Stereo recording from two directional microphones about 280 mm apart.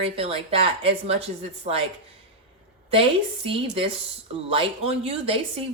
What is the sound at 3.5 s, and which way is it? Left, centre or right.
A woman's voice, centre.